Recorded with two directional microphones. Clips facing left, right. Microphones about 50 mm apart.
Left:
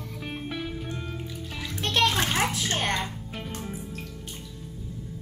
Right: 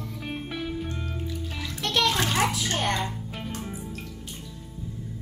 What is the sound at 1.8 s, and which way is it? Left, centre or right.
Music, left.